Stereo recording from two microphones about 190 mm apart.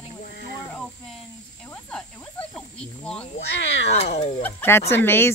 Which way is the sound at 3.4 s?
70° left (ahead or behind).